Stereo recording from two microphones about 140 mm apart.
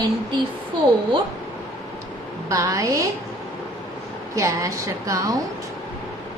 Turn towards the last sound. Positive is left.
turn(degrees=-25)  # may be behind; listen again after turning